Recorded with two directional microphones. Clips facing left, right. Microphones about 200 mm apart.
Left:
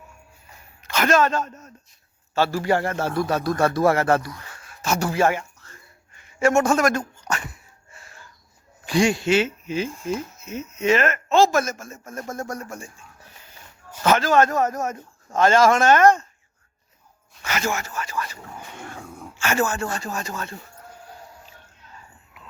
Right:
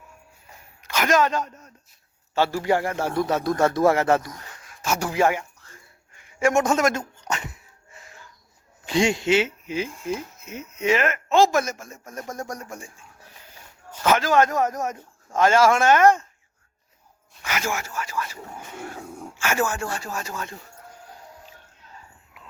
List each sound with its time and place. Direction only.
0.8 s a sound: 10° right (ahead or behind)
2.3 s a man's voice: 15° right (ahead or behind)
4.5 s a sound: 10° right (ahead or behind)
8.9 s speech: 20° right (ahead or behind)
12.0 s speech: 5° left (ahead or behind)
12.3 s speech: 15° right (ahead or behind)
14.0 s speech: 10° right (ahead or behind)
17.4 s speech: 10° right (ahead or behind)